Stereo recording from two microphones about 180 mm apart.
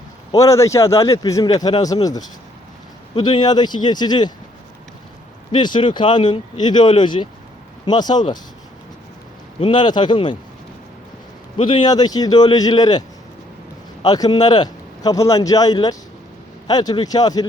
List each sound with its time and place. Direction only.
0.3 s a man's voice: 20° left (ahead or behind)
5.5 s a man's voice: 25° left (ahead or behind)
9.6 s a man's voice: 25° left (ahead or behind)
11.5 s a man's voice: 25° left (ahead or behind)
14.0 s a man's voice: 20° left (ahead or behind)